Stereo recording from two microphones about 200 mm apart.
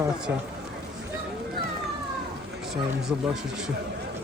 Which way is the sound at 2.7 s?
5° right (ahead or behind).